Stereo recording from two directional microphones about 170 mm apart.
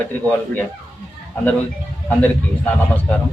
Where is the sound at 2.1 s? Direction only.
10° left (ahead or behind).